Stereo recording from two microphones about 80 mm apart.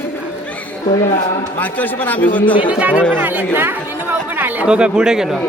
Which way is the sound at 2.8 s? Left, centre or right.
Centre.